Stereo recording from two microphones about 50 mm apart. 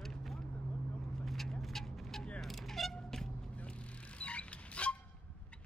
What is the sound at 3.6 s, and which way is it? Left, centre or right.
Vehicle, left.